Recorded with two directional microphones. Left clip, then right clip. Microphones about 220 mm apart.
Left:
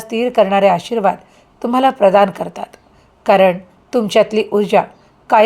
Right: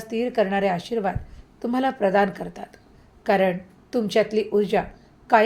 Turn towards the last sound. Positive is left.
turn(degrees=25)  # may be behind; listen again after turning